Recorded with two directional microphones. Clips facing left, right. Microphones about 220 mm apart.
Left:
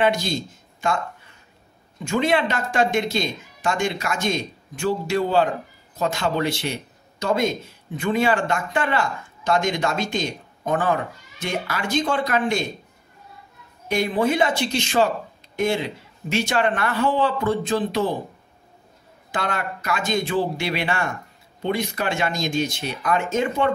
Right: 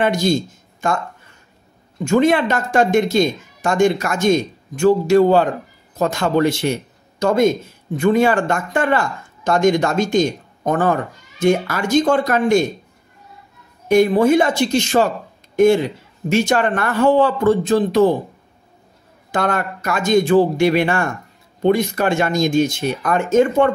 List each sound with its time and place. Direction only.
0.0 s speech: 45° right (ahead or behind)
2.0 s a man's voice: 45° right (ahead or behind)
13.8 s speech: 45° right (ahead or behind)
19.3 s speech: 45° right (ahead or behind)